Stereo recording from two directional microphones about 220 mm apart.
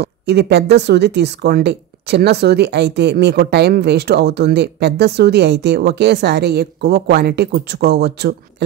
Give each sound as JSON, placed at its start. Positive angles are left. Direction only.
{"t": 0.0, "sound": "speech", "side_deg": -50}